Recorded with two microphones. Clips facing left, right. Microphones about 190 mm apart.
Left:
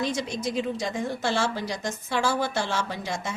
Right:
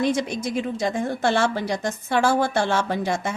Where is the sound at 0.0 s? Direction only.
55° right (ahead or behind).